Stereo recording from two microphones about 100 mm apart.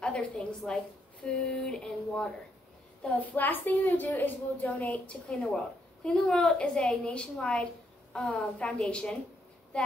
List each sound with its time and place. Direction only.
0.7 s a woman's voice: 10° left (ahead or behind)